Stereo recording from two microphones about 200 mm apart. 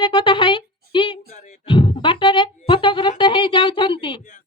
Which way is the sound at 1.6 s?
25° left (ahead or behind).